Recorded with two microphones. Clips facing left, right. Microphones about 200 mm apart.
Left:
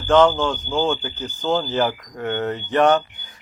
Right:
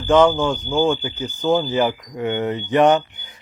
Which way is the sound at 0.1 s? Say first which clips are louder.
Right 1 dB; 10° right (ahead or behind).